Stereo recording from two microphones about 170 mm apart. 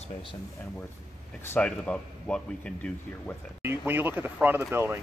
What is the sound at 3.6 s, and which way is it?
Speech, 10° right (ahead or behind).